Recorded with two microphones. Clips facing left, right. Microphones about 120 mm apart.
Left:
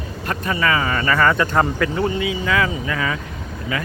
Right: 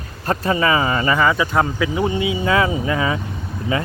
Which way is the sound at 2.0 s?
25° right (ahead or behind).